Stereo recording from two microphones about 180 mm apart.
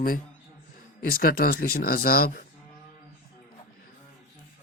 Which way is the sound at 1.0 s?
55° left (ahead or behind).